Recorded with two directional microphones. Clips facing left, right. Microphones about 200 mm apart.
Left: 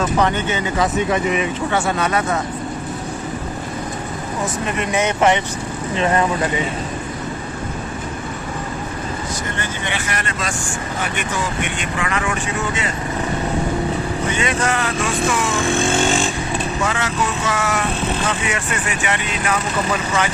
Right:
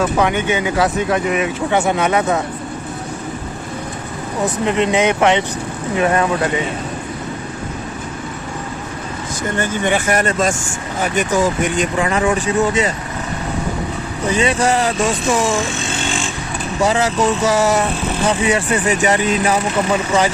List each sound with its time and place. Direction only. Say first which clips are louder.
0.0 s speech: right 2 dB; 10° right (ahead or behind)
1.7 s speech: right 5 dB; 15° right (ahead or behind)
4.6 s speech: right 6 dB; 20° right (ahead or behind)
9.6 s speech: right 8 dB; 45° right (ahead or behind)
14.3 s speech: right 7 dB; 35° right (ahead or behind)
15.7 s vehicle: left 6 dB; 50° left (ahead or behind)
16.8 s speech: right 10 dB; 35° right (ahead or behind)